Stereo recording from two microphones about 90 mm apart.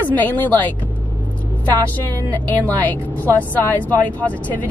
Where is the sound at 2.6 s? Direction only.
20° left (ahead or behind).